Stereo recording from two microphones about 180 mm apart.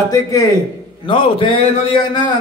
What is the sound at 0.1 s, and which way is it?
A man's voice, 20° left (ahead or behind).